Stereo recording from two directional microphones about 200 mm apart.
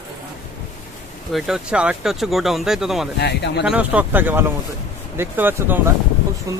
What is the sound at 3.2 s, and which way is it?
Speech, 55° left (ahead or behind).